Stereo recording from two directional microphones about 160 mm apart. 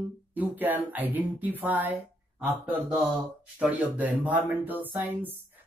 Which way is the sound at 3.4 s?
10° right (ahead or behind).